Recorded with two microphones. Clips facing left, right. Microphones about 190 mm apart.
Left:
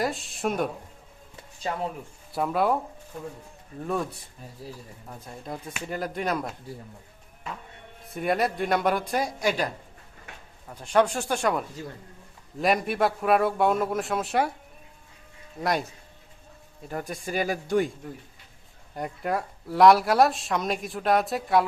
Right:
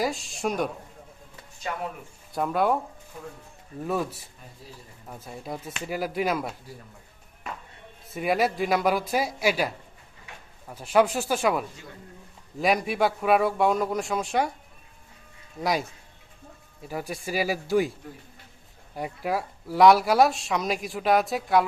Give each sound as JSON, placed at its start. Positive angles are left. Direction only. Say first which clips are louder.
{"t": 0.0, "sound": "speech", "louder": "even", "side_deg": 0}
{"t": 1.7, "sound": "speech", "louder": "left 2 dB", "side_deg": 30}
{"t": 2.3, "sound": "speech", "louder": "even", "side_deg": 0}
{"t": 3.8, "sound": "speech", "louder": "right 1 dB", "side_deg": -5}
{"t": 8.1, "sound": "speech", "louder": "right 1 dB", "side_deg": 0}
{"t": 15.5, "sound": "speech", "louder": "even", "side_deg": 0}
{"t": 16.9, "sound": "speech", "louder": "even", "side_deg": -5}
{"t": 18.9, "sound": "speech", "louder": "even", "side_deg": -5}